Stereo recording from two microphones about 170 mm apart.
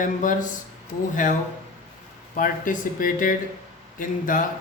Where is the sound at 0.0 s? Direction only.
50° left (ahead or behind).